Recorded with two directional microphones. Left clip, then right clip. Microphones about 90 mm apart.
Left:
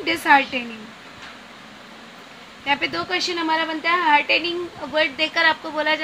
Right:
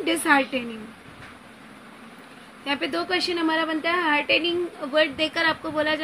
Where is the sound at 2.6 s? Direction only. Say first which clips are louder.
Left 4 dB; 30° right (ahead or behind).